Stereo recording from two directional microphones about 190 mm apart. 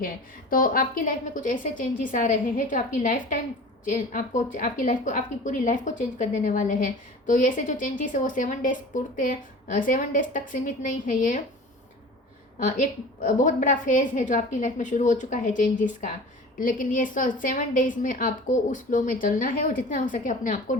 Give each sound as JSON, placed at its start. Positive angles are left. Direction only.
{"t": 0.5, "sound": "a woman's voice", "side_deg": 50}
{"t": 12.8, "sound": "a woman's voice", "side_deg": 45}